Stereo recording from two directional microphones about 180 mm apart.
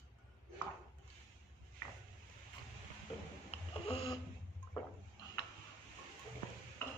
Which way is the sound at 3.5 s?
30° left (ahead or behind).